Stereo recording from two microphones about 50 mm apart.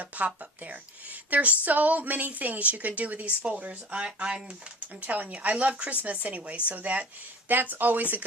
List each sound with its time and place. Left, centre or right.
0.0 s a woman's voice: right
4.9 s a woman's voice: right